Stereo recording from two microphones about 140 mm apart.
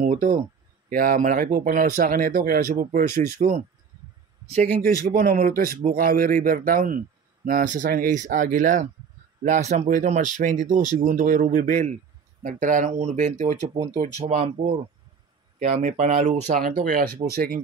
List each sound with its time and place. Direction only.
0.0 s speech: 80° right; by 3.6 s 60° right (ahead or behind)
4.8 s speech: 90° right; by 13.6 s 70° right (ahead or behind)
13.7 s speech: 50° right (ahead or behind)
15.7 s speech: 55° right (ahead or behind)
16.6 s speech: 90° right